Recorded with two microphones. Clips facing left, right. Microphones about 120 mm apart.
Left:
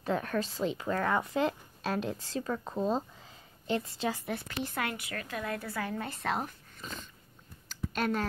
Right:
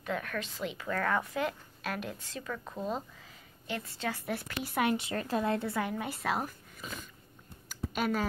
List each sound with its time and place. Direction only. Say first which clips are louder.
0.0 s speech: left 4 dB; 30° left (ahead or behind)
4.3 s a woman's voice: left 1 dB; 10° right (ahead or behind)